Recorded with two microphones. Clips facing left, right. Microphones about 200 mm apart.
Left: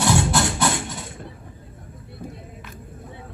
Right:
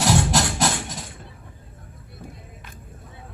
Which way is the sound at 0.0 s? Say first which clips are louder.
Left 1 dB; 40° right (ahead or behind).